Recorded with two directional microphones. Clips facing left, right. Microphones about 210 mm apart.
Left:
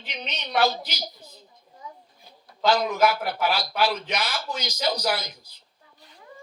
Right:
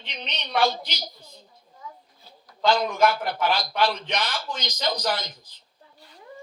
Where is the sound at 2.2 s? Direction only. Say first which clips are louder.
Even; 5° left (ahead or behind).